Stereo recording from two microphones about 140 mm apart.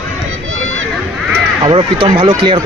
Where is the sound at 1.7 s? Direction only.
40° right (ahead or behind).